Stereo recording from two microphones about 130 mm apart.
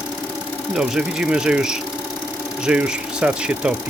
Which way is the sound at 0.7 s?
5° right (ahead or behind).